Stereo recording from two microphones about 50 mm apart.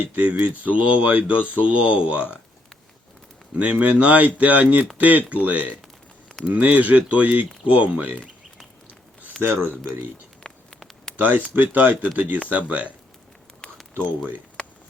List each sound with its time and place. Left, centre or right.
0.0 s speech: right
3.5 s speech: right
10.4 s a sound: left
11.2 s speech: right